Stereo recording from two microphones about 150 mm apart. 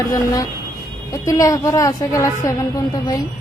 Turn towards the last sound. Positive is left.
turn(degrees=25)  # may be behind; listen again after turning